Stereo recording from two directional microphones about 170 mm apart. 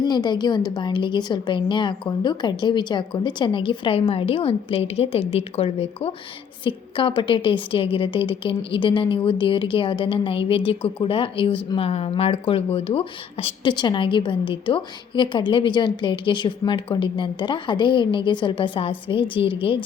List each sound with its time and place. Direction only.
0.0 s a woman's voice: 25° left (ahead or behind)